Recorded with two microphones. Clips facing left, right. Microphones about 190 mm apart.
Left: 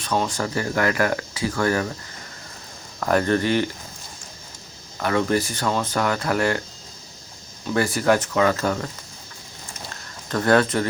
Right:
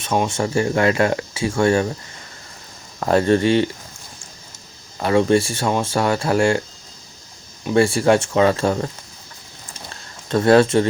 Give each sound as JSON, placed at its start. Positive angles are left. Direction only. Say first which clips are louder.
{"t": 0.0, "sound": "speech", "louder": "right 4 dB", "side_deg": -25}
{"t": 3.0, "sound": "speech", "louder": "right 4 dB", "side_deg": -25}
{"t": 4.9, "sound": "speech", "louder": "right 5 dB", "side_deg": -25}
{"t": 7.6, "sound": "speech", "louder": "right 6 dB", "side_deg": -25}
{"t": 10.2, "sound": "speech", "louder": "right 5 dB", "side_deg": -25}